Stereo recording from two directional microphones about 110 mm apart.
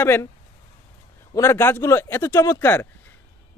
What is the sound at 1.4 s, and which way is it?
Speech, 20° left (ahead or behind).